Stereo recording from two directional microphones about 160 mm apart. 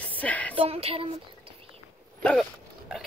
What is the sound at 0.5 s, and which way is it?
Speech, 35° right (ahead or behind).